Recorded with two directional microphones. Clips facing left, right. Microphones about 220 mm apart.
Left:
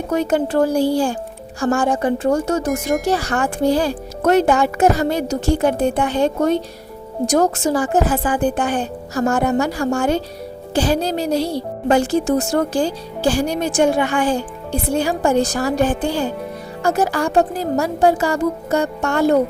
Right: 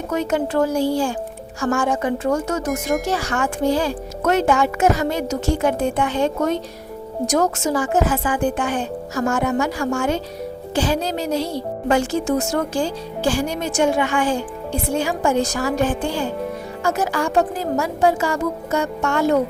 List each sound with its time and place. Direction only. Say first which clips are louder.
0.1 s speech: left 3 dB; 35° left (ahead or behind)
2.8 s speech: left 2 dB; centre (ahead or behind)
3.1 s speech: left 3 dB; 35° left (ahead or behind)